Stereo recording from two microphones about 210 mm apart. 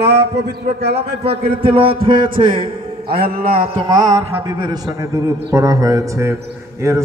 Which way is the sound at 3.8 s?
20° right (ahead or behind).